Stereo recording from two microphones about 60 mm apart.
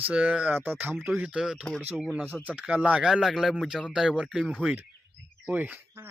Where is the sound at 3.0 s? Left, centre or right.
Centre.